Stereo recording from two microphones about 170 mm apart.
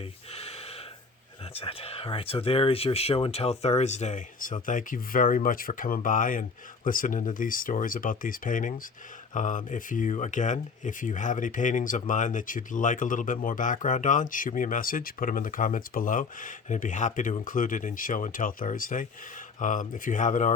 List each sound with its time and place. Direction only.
1.5 s speech: 35° left (ahead or behind)